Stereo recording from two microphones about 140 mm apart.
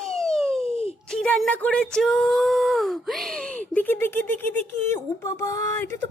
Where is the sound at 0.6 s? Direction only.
45° left (ahead or behind).